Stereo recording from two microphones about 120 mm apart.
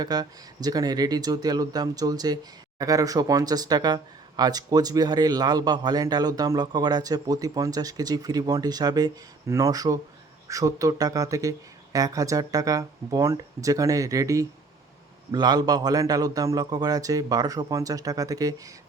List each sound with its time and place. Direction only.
0.0 s speech: 35° right (ahead or behind)